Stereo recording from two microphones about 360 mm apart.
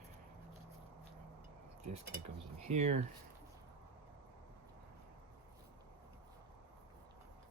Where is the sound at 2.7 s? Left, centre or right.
Centre.